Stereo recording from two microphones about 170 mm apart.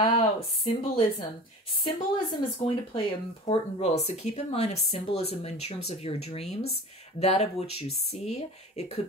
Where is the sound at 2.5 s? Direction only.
30° left (ahead or behind).